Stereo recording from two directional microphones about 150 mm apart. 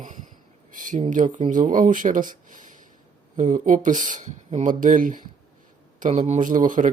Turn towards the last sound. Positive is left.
turn(degrees=-60)  # may be behind; listen again after turning